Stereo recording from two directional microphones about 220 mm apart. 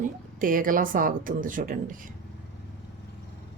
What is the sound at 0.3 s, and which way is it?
A woman's voice, 40° right (ahead or behind).